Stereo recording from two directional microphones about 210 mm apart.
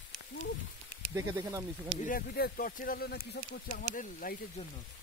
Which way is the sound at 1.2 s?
15° right (ahead or behind).